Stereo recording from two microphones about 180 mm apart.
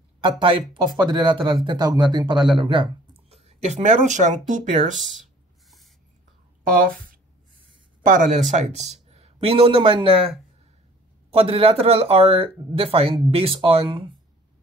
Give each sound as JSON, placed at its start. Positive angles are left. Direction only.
{"t": 0.2, "sound": "speech", "side_deg": -30}
{"t": 2.3, "sound": "speech", "side_deg": 0}
{"t": 2.6, "sound": "speech", "side_deg": -30}
{"t": 8.0, "sound": "speech", "side_deg": -45}
{"t": 11.3, "sound": "speech", "side_deg": -30}